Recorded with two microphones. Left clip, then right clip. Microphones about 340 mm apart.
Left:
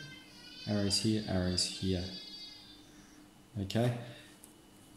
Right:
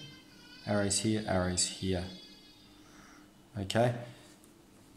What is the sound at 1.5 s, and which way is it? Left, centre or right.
Speech, right.